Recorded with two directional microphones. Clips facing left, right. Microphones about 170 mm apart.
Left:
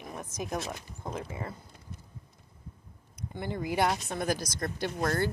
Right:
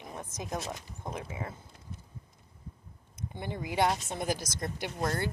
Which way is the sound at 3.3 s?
20° right (ahead or behind).